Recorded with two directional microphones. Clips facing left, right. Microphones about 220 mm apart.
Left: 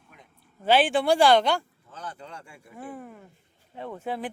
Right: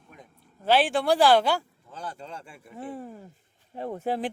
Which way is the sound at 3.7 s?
35° right (ahead or behind).